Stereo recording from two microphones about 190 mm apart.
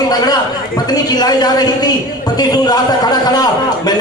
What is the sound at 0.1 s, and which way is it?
A man's voice, 20° left (ahead or behind).